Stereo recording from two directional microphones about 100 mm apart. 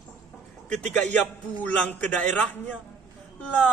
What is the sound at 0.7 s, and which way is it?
A man's voice, 10° left (ahead or behind).